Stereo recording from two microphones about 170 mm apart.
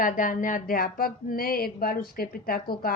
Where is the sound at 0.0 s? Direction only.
50° left (ahead or behind).